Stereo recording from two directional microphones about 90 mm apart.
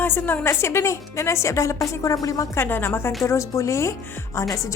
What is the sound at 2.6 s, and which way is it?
A woman's voice, 25° left (ahead or behind).